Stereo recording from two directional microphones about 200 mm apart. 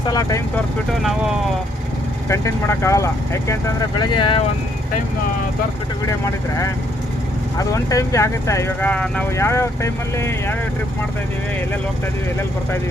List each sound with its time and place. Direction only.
0.1 s speech: 15° left (ahead or behind)
2.3 s speech: 15° left (ahead or behind)
6.1 s speech: 15° left (ahead or behind)